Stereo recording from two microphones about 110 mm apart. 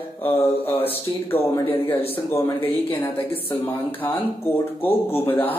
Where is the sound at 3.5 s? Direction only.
20° left (ahead or behind).